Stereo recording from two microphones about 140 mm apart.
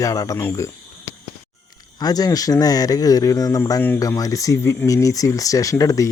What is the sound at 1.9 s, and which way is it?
Speech, 30° left (ahead or behind).